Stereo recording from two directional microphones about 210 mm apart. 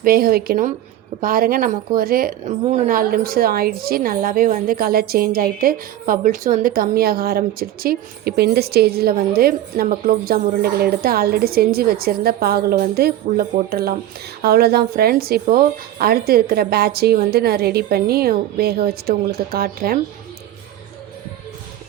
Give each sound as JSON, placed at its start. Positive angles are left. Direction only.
{"t": 0.0, "sound": "a woman's voice", "side_deg": -45}